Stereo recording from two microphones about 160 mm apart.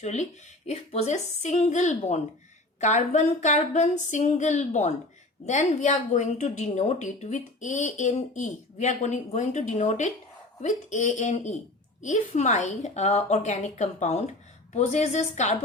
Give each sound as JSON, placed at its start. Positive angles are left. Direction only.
{"t": 0.0, "sound": "a woman's voice", "side_deg": 45}